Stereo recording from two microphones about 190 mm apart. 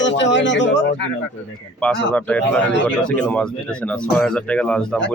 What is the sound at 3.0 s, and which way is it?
Speech, 5° left (ahead or behind).